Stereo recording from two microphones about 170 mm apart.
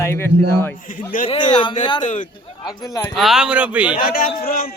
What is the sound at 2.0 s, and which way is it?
Speech, 50° left (ahead or behind).